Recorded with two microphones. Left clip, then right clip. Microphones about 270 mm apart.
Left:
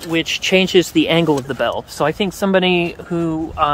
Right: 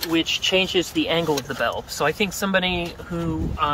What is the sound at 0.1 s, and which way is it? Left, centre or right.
Speech, left.